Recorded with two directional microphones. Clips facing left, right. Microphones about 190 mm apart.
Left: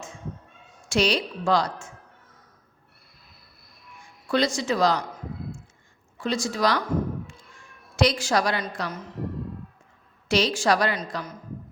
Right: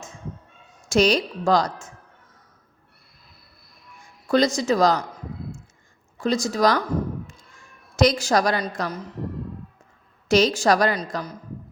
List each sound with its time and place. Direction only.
0.9 s a woman's voice: 45° right (ahead or behind)
4.3 s speech: 40° right (ahead or behind)
6.1 s speech: 40° right (ahead or behind)
7.9 s a woman's voice: 40° right (ahead or behind)
10.2 s a woman's voice: 45° right (ahead or behind)